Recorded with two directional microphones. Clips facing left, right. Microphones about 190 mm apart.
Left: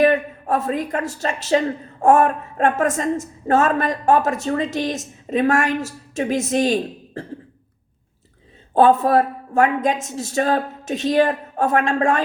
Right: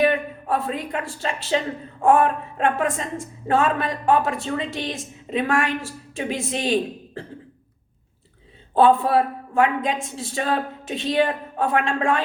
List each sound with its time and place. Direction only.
0.0 s a woman's voice: 45° left (ahead or behind)
8.7 s a woman's voice: 45° left (ahead or behind)